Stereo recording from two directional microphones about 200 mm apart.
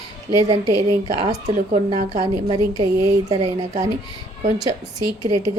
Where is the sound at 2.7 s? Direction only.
20° right (ahead or behind).